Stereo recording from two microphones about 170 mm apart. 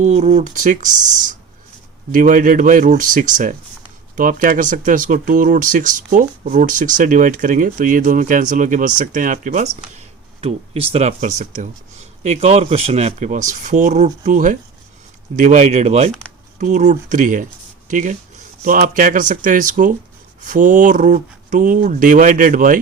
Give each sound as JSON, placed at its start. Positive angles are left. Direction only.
{"t": 0.0, "sound": "speech", "side_deg": -45}
{"t": 10.4, "sound": "speech", "side_deg": -35}